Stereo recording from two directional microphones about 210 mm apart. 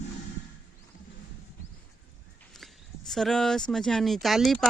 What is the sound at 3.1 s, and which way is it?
Speech, centre (ahead or behind).